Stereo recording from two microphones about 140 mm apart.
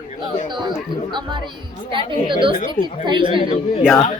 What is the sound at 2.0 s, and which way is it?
A woman's voice, 35° right (ahead or behind).